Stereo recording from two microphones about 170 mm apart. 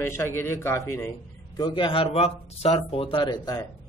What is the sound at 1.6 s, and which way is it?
Speech, 25° left (ahead or behind).